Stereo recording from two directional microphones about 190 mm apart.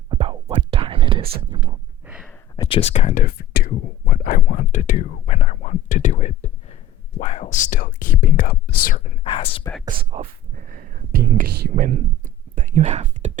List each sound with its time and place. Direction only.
0.1 s whispering: 30° right (ahead or behind)
1.4 s a sound: 25° right (ahead or behind)
2.0 s a sound: 5° right (ahead or behind)
2.6 s speech: 30° left (ahead or behind); by 9.1 s 50° left (ahead or behind)
9.2 s speech: 30° left (ahead or behind)
9.8 s speech: 30° right (ahead or behind)
10.7 s whispering: 45° right (ahead or behind)
11.9 s whispering: 40° right (ahead or behind)